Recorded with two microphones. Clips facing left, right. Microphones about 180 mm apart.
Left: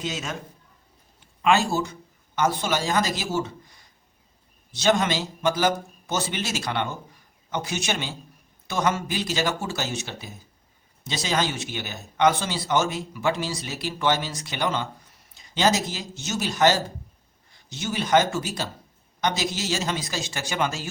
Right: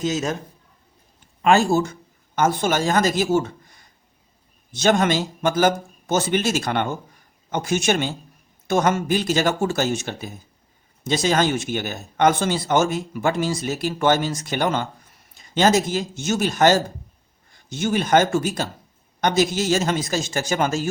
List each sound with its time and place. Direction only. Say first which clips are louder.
0.0 s a man's voice: right 8 dB; 40° right (ahead or behind)
1.4 s a man's voice: right 5 dB; 45° right (ahead or behind)